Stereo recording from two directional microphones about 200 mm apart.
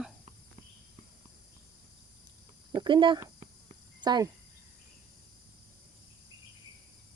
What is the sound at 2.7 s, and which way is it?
Speech, 25° right (ahead or behind).